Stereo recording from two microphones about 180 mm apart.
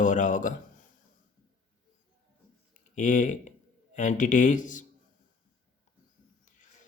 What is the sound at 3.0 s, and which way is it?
Speech, 45° left (ahead or behind).